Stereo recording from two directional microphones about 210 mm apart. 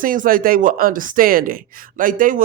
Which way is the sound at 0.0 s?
40° right (ahead or behind).